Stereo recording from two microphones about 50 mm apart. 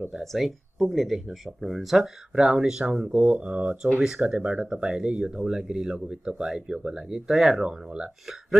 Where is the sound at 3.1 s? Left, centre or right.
Right.